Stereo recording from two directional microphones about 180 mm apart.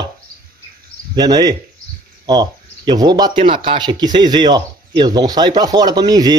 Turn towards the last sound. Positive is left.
turn(degrees=-20)  # may be behind; listen again after turning